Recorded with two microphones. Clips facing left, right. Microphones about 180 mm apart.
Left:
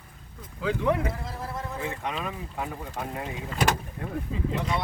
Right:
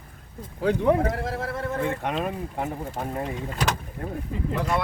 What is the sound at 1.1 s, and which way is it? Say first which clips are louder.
Speech: right 6 dB; 75° right (ahead or behind).